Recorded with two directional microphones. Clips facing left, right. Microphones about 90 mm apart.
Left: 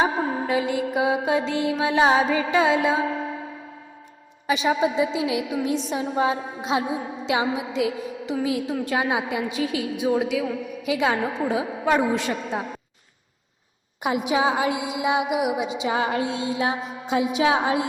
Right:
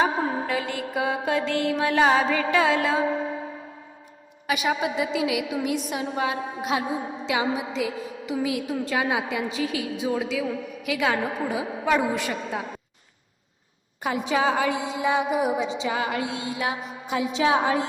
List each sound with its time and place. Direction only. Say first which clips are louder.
0.0 s mantra: left 1 dB; 20° left (ahead or behind)
4.4 s a woman's voice: left 3 dB; 25° left (ahead or behind)
14.0 s mantra: left 2 dB; 15° left (ahead or behind)
15.9 s a woman's voice: left 3 dB; 30° left (ahead or behind)